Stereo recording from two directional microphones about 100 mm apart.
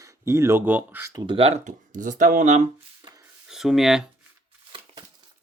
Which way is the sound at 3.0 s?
55° right (ahead or behind).